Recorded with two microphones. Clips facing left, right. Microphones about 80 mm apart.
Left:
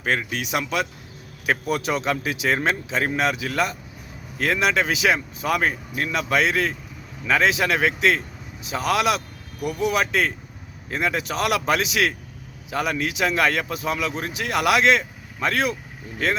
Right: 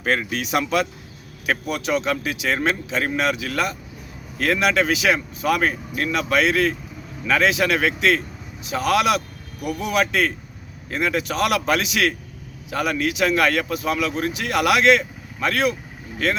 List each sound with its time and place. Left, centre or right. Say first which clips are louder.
0.0 s speech: right 2 dB; centre
1.7 s a man's voice: right 3 dB; left